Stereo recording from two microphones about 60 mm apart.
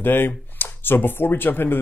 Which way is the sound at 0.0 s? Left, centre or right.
Left.